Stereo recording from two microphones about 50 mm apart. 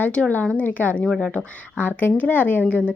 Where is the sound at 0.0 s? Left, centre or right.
Left.